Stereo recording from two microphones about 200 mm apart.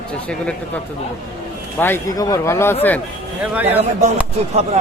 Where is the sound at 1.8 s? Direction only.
15° left (ahead or behind).